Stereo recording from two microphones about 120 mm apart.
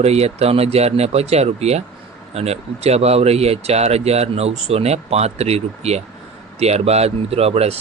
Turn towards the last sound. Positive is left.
turn(degrees=-60)  # may be behind; listen again after turning